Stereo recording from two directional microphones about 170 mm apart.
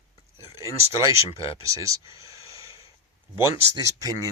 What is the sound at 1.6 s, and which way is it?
Speech, 20° right (ahead or behind).